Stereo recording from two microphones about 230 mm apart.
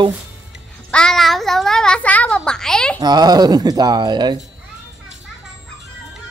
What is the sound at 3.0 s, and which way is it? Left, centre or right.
Speech, centre.